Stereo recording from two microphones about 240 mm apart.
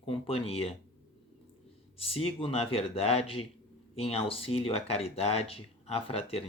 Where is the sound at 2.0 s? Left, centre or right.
Left.